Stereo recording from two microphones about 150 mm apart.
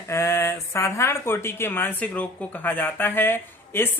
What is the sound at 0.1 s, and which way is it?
Speech, 20° left (ahead or behind).